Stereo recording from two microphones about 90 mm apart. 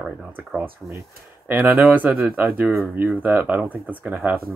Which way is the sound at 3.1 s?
15° right (ahead or behind).